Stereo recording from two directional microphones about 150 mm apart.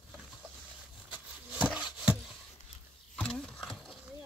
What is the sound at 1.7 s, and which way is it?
Wood, 5° right (ahead or behind).